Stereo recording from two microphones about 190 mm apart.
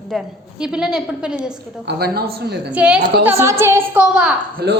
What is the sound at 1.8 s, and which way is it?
Speech, 55° right (ahead or behind).